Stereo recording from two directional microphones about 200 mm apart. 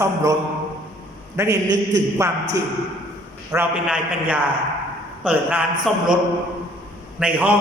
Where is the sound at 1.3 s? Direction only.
15° right (ahead or behind).